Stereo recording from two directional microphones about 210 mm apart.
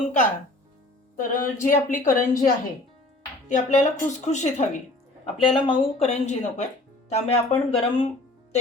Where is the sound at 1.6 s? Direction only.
40° left (ahead or behind).